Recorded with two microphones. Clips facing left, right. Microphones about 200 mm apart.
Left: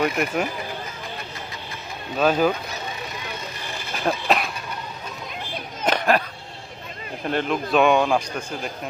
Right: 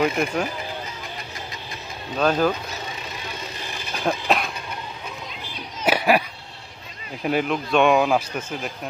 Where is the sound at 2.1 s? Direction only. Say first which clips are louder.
Left 1 dB; 5° left (ahead or behind).